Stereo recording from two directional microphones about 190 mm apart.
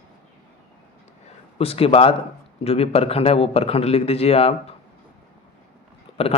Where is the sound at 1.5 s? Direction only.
30° left (ahead or behind).